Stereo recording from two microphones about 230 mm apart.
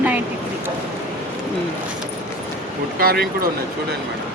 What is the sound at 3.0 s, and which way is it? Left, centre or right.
Speech, right.